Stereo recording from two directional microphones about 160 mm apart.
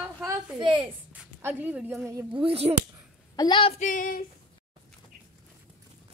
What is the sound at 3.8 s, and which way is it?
Female singing, 55° left (ahead or behind).